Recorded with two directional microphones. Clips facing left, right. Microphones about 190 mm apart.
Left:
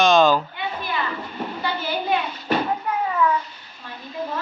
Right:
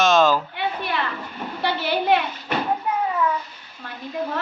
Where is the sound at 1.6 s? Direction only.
70° right (ahead or behind).